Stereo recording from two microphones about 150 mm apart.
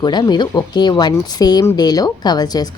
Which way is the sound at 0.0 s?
30° left (ahead or behind).